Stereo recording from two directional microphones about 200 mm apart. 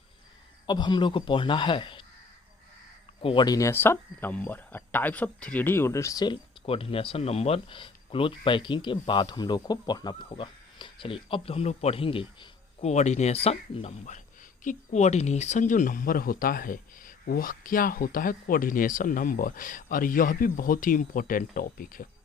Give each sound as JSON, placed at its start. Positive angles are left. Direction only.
{"t": 0.7, "sound": "speech", "side_deg": 20}
{"t": 3.2, "sound": "speech", "side_deg": 25}